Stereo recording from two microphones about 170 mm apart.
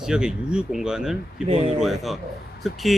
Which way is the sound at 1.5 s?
30° right (ahead or behind).